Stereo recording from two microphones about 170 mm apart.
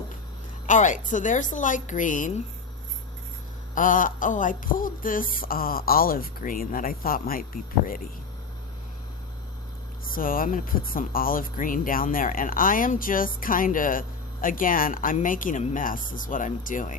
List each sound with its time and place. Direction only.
0.7 s speech: 45° left (ahead or behind)
3.8 s speech: 50° left (ahead or behind)
10.1 s speech: 55° left (ahead or behind)